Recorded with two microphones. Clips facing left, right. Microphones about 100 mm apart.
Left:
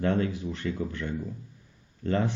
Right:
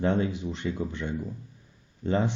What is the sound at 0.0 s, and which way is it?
A man's voice, 20° right (ahead or behind).